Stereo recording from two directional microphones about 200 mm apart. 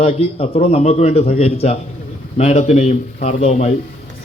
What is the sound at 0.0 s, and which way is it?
A man's voice, 30° left (ahead or behind).